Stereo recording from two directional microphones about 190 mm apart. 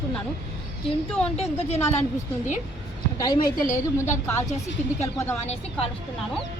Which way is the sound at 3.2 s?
20° left (ahead or behind).